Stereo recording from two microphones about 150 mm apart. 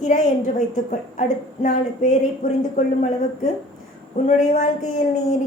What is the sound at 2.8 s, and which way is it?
Speech, 55° left (ahead or behind).